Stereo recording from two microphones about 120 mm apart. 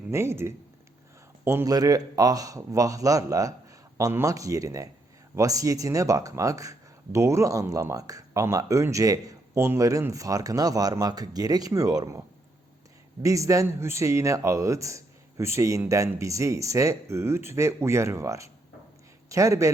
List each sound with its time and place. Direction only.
0.1 s speech: 20° right (ahead or behind)
13.2 s speech: 25° right (ahead or behind)